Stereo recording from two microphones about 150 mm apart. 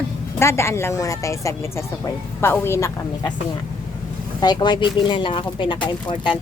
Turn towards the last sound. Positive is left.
turn(degrees=30)  # may be behind; listen again after turning